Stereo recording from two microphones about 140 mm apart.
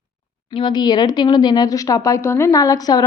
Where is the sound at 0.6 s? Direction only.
30° left (ahead or behind).